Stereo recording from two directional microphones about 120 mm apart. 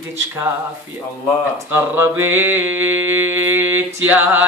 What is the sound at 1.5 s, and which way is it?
Mantra, 20° right (ahead or behind).